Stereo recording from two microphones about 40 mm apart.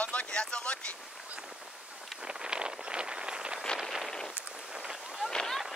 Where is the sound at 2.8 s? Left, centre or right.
Right.